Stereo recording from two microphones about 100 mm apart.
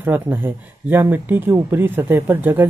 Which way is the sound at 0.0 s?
20° right (ahead or behind).